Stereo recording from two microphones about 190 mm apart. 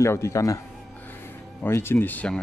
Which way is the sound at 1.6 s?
10° left (ahead or behind).